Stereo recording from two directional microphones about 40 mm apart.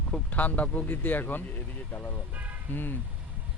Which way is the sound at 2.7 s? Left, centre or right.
Left.